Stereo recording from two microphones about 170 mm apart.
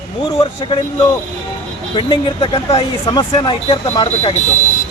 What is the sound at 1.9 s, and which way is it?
Speech, 30° left (ahead or behind).